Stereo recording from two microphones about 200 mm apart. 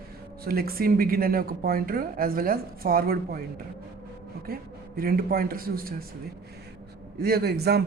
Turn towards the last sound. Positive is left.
turn(degrees=-55)  # may be behind; listen again after turning